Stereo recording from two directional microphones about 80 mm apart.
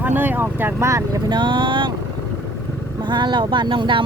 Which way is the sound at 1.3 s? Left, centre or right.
Right.